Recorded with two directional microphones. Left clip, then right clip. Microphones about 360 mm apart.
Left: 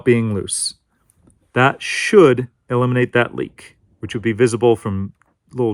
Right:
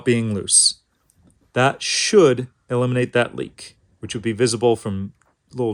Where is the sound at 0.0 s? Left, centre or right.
Centre.